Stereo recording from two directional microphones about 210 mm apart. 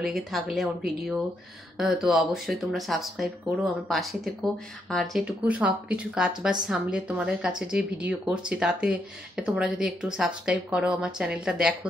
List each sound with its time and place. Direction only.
0.0 s speech: centre (ahead or behind)